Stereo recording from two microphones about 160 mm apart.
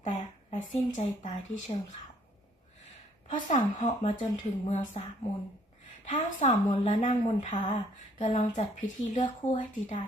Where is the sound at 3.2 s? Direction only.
50° left (ahead or behind).